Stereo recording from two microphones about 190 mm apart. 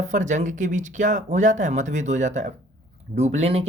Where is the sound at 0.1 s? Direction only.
40° right (ahead or behind).